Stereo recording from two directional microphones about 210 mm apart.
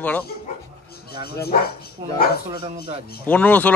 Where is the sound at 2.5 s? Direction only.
25° right (ahead or behind).